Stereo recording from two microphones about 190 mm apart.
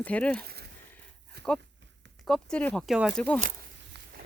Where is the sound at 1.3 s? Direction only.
60° right (ahead or behind).